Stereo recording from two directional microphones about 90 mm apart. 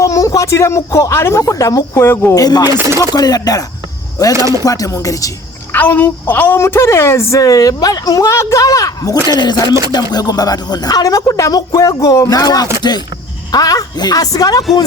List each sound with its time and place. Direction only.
0.0 s speech: 40° left (ahead or behind)
2.0 s speech: 25° left (ahead or behind)
2.3 s speech: 45° left (ahead or behind)
5.7 s speech: 20° left (ahead or behind); by 9.1 s 40° left (ahead or behind)
9.2 s speech: 50° left (ahead or behind)